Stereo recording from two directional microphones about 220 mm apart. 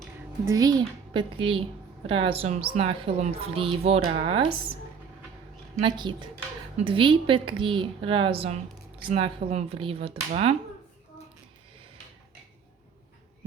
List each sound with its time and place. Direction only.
0.4 s a woman's voice: 15° right (ahead or behind)
5.8 s a woman's voice: 20° right (ahead or behind)